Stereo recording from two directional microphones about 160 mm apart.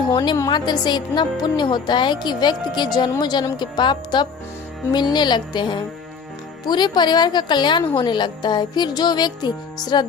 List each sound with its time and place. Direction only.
0.1 s a woman's voice: 20° left (ahead or behind)